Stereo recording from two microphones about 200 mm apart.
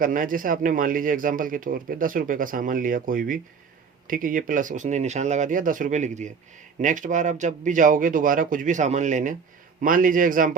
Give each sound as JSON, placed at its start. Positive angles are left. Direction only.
{"t": 0.0, "sound": "a man's voice", "side_deg": -45}